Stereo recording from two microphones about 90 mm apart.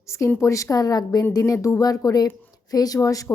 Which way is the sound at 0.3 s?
35° left (ahead or behind).